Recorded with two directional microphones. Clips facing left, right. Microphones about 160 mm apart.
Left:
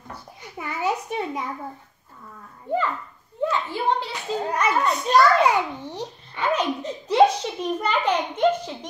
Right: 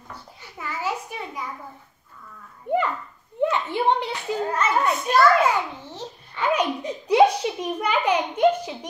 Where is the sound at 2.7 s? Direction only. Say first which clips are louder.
Right 2 dB; 15° right (ahead or behind).